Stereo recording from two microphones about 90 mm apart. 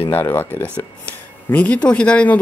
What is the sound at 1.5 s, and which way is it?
Speech, 15° left (ahead or behind).